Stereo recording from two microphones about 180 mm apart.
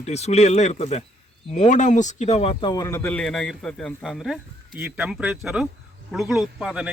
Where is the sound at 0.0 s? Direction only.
40° left (ahead or behind).